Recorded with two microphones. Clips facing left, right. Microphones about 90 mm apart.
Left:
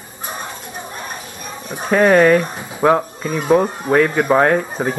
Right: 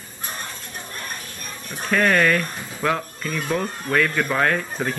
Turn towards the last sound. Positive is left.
turn(degrees=25)  # may be behind; listen again after turning